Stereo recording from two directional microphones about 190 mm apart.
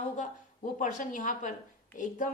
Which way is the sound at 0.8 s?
40° left (ahead or behind).